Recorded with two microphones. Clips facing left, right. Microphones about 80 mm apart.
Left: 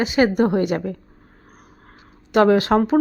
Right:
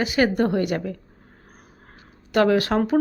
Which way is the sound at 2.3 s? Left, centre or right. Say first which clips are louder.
Left 4 dB; left.